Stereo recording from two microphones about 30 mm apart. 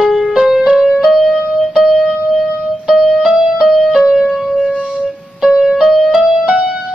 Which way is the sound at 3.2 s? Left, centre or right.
Centre.